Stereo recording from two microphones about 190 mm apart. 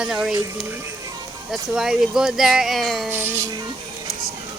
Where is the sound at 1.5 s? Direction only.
5° right (ahead or behind).